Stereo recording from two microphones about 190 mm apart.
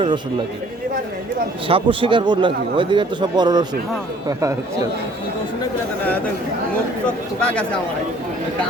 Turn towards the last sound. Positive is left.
turn(degrees=5)  # may be behind; listen again after turning